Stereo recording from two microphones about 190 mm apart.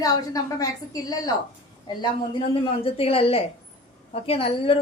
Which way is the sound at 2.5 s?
30° left (ahead or behind).